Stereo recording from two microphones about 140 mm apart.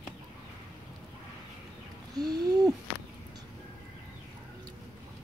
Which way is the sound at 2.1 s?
30° right (ahead or behind).